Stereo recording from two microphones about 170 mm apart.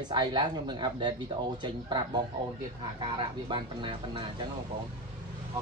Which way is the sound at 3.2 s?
30° right (ahead or behind).